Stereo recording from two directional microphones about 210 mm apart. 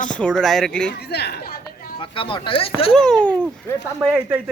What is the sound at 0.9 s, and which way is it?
Speech, 50° left (ahead or behind).